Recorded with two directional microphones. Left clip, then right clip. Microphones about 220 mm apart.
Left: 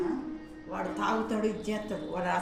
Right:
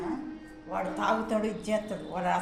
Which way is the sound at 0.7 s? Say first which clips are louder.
Right 2 dB; 35° right (ahead or behind).